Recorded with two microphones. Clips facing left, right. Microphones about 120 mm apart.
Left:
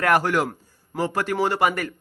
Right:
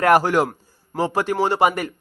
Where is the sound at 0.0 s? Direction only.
35° right (ahead or behind).